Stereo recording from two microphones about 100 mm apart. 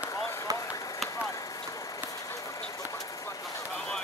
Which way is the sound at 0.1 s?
35° left (ahead or behind).